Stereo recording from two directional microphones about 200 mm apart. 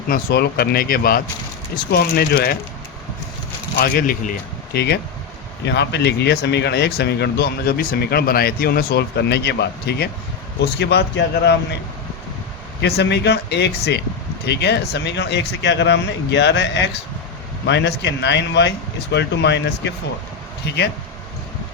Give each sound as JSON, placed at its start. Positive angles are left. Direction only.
{"t": 0.1, "sound": "speech", "side_deg": 50}
{"t": 3.8, "sound": "speech", "side_deg": 45}
{"t": 12.8, "sound": "speech", "side_deg": 55}